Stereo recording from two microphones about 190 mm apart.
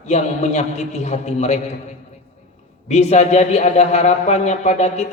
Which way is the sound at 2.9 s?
35° left (ahead or behind).